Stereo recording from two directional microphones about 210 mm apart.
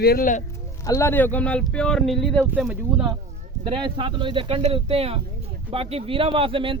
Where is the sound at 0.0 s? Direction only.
45° left (ahead or behind).